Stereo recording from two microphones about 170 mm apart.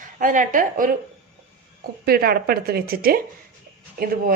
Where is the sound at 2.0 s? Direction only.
65° right (ahead or behind).